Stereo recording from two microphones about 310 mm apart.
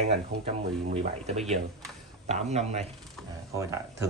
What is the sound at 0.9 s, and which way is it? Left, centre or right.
Speech, right.